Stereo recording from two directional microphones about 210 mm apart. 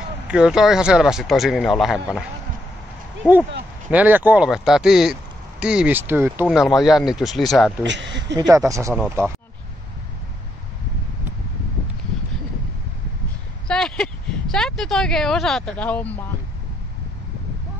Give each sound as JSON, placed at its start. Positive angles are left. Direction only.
{"t": 0.3, "sound": "speech", "side_deg": -5}
{"t": 3.9, "sound": "speech", "side_deg": -10}
{"t": 7.8, "sound": "speech", "side_deg": -60}
{"t": 8.4, "sound": "speech", "side_deg": -15}
{"t": 13.7, "sound": "a sound", "side_deg": 5}